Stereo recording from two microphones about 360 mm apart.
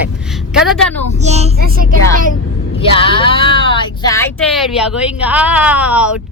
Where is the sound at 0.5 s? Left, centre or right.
Centre.